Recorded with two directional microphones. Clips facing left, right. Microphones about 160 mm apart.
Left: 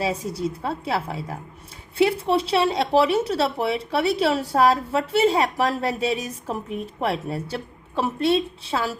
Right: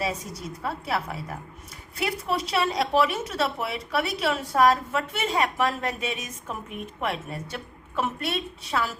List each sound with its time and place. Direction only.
0.0 s a woman's voice: 30° left (ahead or behind)